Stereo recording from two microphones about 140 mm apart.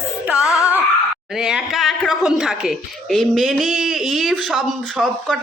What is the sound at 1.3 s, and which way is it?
Speech, 5° right (ahead or behind).